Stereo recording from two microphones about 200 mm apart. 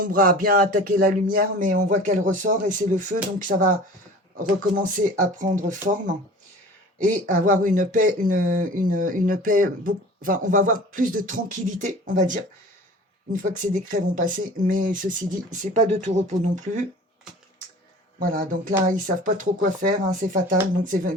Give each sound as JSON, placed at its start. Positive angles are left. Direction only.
{"t": 0.0, "sound": "speech", "side_deg": -45}
{"t": 7.1, "sound": "speech", "side_deg": -40}
{"t": 18.2, "sound": "speech", "side_deg": -45}